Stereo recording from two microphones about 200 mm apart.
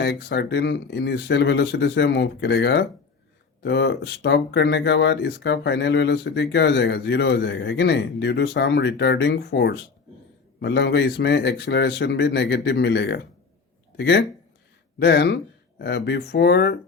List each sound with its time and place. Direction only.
0.0 s speech: 55° left (ahead or behind)